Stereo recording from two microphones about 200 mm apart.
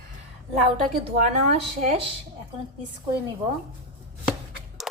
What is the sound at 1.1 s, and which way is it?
Speech, 35° right (ahead or behind).